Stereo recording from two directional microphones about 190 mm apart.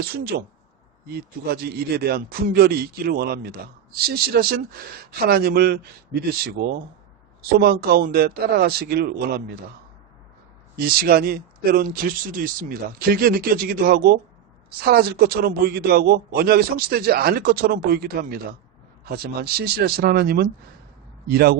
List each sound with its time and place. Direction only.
0.1 s a man's voice: 55° right (ahead or behind)
10.8 s a man's voice: 50° right (ahead or behind)